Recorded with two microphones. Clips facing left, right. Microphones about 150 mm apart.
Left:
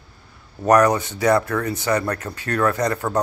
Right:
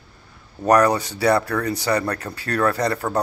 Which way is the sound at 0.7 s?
35° right (ahead or behind).